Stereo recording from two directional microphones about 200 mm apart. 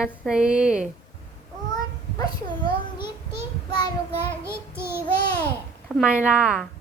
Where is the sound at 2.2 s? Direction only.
20° left (ahead or behind).